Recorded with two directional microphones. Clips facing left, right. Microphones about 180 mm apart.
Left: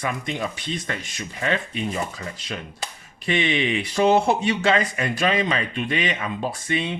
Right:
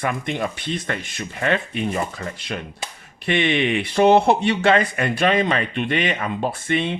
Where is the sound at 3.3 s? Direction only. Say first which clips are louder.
Right 3 dB; 60° right (ahead or behind).